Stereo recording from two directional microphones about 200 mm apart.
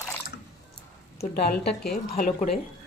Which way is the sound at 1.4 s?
50° left (ahead or behind).